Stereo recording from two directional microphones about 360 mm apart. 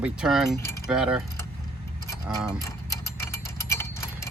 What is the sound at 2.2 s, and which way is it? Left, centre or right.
Speech, centre.